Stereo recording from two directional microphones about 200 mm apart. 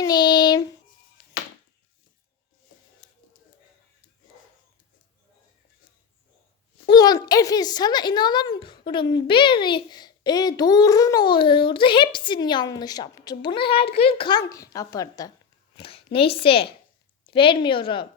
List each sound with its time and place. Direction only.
0.0 s child singing: 20° left (ahead or behind)
6.8 s a woman's voice: 20° left (ahead or behind)
15.8 s a sound: 30° left (ahead or behind)
16.1 s a woman's voice: 25° left (ahead or behind)